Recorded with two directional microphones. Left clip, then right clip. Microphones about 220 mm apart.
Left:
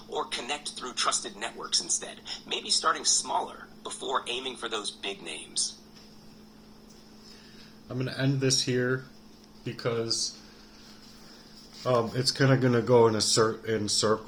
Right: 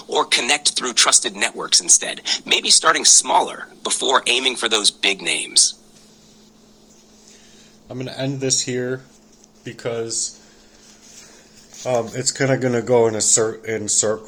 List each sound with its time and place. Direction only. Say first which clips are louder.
0.1 s speech: right 15 dB; 35° right (ahead or behind)
7.9 s speech: right 5 dB; 5° left (ahead or behind)
11.9 s speech: right 5 dB; 10° left (ahead or behind)